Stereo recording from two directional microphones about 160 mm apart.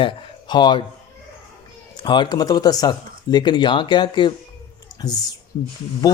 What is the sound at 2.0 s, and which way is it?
Speech, 25° left (ahead or behind).